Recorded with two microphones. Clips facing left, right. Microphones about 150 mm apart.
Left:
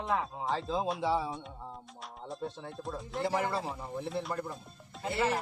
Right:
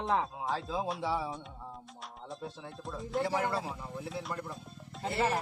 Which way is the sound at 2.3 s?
Centre (ahead or behind).